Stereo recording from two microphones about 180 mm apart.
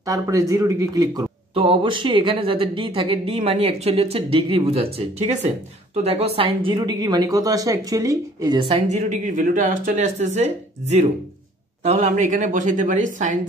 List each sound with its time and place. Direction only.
0.0 s a woman's voice: 20° right (ahead or behind); by 13.4 s 45° right (ahead or behind)